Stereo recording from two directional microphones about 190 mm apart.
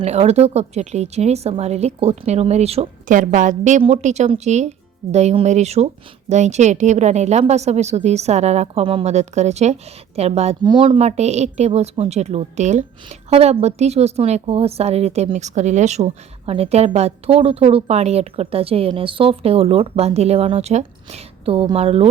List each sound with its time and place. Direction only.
0.0 s speech: 35° right (ahead or behind)